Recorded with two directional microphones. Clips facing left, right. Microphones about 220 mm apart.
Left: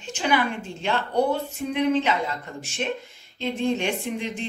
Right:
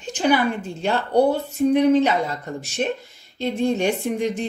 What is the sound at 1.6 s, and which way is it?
A woman's voice, 40° right (ahead or behind).